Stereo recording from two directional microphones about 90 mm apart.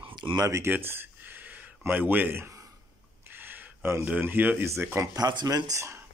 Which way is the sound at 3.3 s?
20° right (ahead or behind).